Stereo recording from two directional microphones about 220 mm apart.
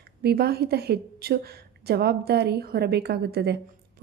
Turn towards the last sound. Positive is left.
turn(degrees=-45)  # may be behind; listen again after turning